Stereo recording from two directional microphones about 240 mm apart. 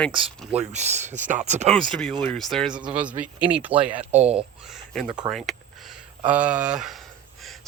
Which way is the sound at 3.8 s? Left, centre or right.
Right.